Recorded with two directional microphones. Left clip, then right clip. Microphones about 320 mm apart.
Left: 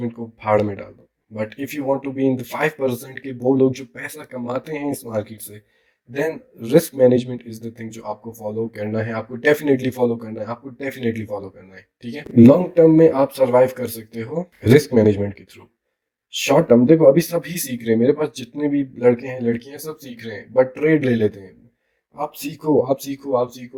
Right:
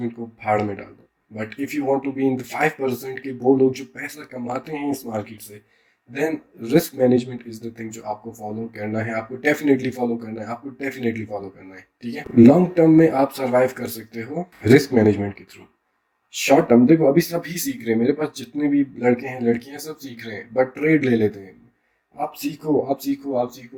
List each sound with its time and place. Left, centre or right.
0.3 s speech: left
6.6 s speech: left
16.6 s speech: left